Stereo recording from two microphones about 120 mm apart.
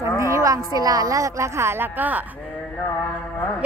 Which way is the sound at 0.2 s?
25° right (ahead or behind).